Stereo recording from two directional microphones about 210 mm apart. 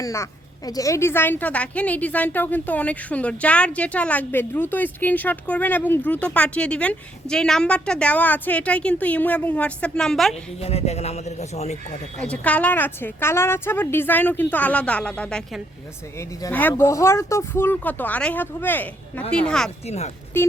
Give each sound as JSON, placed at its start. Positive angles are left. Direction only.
{"t": 0.0, "sound": "a woman's voice", "side_deg": 15}
{"t": 10.6, "sound": "a man's voice", "side_deg": 30}
{"t": 12.2, "sound": "a woman's voice", "side_deg": 5}